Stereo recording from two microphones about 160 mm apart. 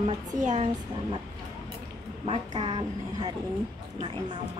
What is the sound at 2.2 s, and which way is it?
Speech, 35° right (ahead or behind).